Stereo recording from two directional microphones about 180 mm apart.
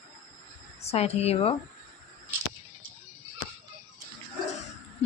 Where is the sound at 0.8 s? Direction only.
35° left (ahead or behind).